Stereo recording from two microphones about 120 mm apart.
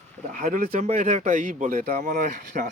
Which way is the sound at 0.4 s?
80° right.